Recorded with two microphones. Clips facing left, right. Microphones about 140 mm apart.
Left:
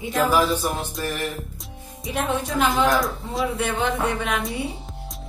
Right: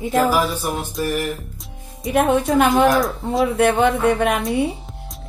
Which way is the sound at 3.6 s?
60° right (ahead or behind).